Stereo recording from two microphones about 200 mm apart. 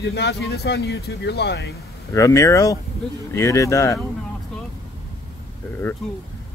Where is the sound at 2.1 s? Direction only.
15° left (ahead or behind).